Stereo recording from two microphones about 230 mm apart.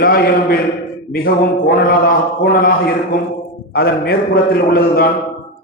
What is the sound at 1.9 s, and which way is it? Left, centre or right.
A man's voice, left.